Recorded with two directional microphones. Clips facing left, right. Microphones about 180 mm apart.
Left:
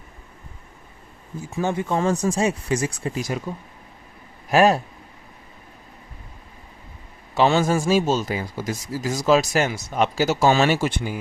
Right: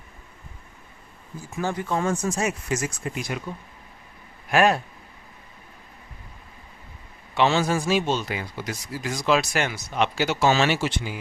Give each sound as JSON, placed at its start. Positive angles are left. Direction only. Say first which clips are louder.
{"t": 1.5, "sound": "speech", "louder": "left 3 dB", "side_deg": 25}
{"t": 4.4, "sound": "speech", "louder": "left 3 dB", "side_deg": 35}
{"t": 7.3, "sound": "speech", "louder": "left 3 dB", "side_deg": 40}